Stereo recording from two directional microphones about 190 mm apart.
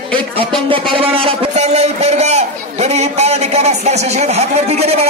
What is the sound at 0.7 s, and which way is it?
A man's voice, 30° right (ahead or behind).